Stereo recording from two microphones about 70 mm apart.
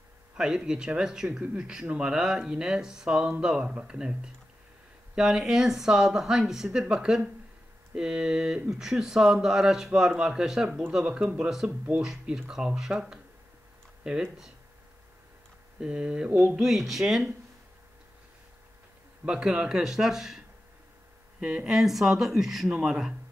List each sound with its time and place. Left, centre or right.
0.4 s speech: centre
11.1 s a sound: centre
11.3 s speech: centre
15.8 s speech: centre
16.3 s a sound: right
16.5 s speech: centre
19.2 s speech: centre